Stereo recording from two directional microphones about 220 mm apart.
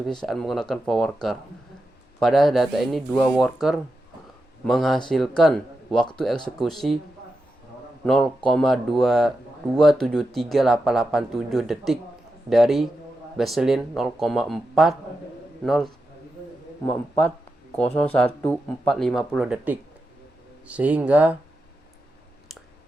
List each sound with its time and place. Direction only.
0.0 s speech: centre (ahead or behind)
8.0 s speech: centre (ahead or behind)
17.9 s speech: 5° left (ahead or behind)